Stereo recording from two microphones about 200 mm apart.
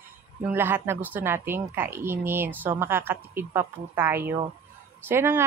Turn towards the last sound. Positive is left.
turn(degrees=-10)  # may be behind; listen again after turning